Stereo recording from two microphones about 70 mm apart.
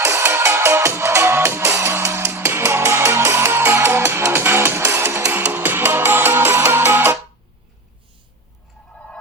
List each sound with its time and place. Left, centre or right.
0.0 s music: right
5.3 s music: right